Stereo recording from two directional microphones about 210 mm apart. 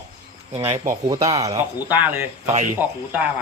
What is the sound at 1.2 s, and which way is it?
Speech, 15° right (ahead or behind).